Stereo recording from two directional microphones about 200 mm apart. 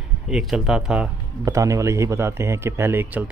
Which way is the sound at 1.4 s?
15° right (ahead or behind).